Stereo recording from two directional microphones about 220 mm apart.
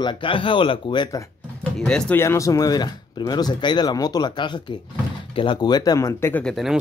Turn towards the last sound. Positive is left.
turn(degrees=0)  # may be behind; listen again after turning